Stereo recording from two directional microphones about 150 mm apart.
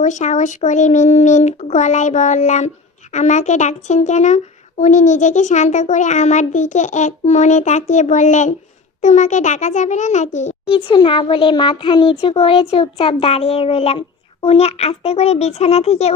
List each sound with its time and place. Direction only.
0.0 s speech: 55° left (ahead or behind)
10.7 s a child's voice: 35° left (ahead or behind)